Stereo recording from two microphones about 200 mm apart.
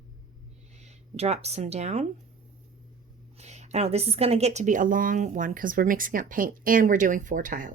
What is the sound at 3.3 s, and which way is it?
A woman's voice, 35° right (ahead or behind).